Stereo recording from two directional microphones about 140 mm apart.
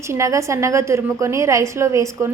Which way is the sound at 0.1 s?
20° right (ahead or behind).